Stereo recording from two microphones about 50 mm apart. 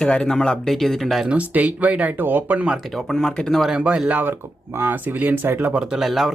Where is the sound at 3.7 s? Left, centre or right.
Right.